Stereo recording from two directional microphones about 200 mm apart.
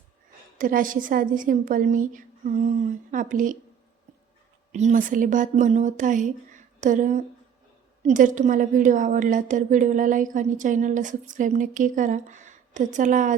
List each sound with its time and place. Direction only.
0.6 s a woman's voice: 45° right (ahead or behind)
4.7 s a woman's voice: 35° right (ahead or behind)